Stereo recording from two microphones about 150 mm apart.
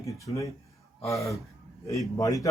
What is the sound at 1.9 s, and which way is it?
Speech, 20° left (ahead or behind).